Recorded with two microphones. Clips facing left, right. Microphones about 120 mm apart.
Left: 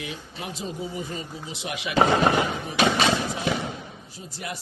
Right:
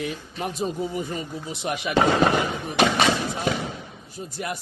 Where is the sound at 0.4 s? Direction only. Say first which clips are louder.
Right 6 dB; 45° right (ahead or behind).